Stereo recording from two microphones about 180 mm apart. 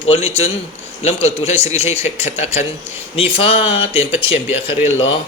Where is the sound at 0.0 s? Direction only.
35° left (ahead or behind).